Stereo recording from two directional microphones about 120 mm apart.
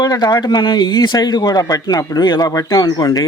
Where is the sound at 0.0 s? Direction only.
35° left (ahead or behind).